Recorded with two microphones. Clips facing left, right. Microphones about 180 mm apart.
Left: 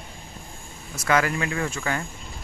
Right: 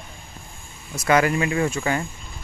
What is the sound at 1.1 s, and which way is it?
Speech, 20° right (ahead or behind).